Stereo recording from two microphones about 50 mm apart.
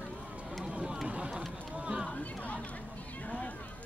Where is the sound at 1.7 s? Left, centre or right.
Right.